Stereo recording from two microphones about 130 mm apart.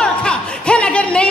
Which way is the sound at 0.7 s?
5° left (ahead or behind).